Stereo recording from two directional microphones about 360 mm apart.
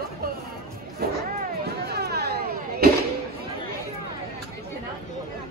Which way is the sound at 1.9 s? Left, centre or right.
Right.